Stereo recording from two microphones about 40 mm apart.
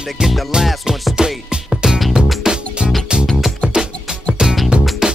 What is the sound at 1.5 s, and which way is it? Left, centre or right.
Music, centre.